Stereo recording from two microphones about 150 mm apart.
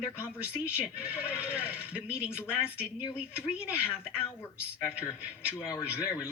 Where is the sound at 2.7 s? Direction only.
10° right (ahead or behind).